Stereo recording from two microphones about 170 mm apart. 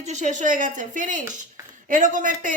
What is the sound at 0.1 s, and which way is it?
Speech, 45° right (ahead or behind).